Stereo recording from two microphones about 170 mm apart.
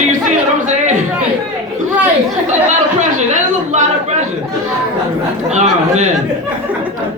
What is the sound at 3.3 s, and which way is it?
Speech, 45° right (ahead or behind).